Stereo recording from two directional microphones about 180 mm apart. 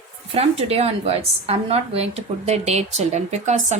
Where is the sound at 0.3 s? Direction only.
35° right (ahead or behind).